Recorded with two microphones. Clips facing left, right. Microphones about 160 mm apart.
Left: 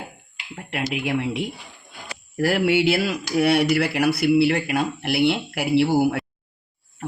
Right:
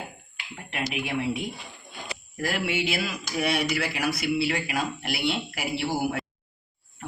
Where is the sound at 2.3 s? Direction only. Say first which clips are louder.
Left 9 dB; 65° left (ahead or behind).